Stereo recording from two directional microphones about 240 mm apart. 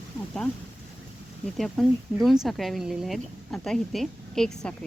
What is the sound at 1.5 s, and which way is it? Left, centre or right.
Speech, centre.